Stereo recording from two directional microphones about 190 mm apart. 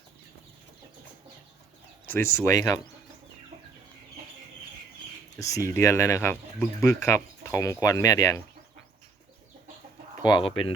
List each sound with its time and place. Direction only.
2.0 s speech: 10° left (ahead or behind)
5.4 s speech: 15° left (ahead or behind)
10.2 s speech: 25° left (ahead or behind)